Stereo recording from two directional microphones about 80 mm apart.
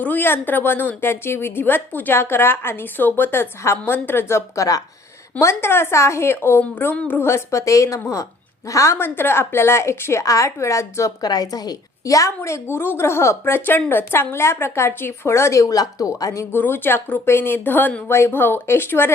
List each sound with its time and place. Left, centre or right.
0.0 s a woman's voice: left
9.0 s a woman's voice: left
11.3 s a woman's voice: left
16.5 s speech: left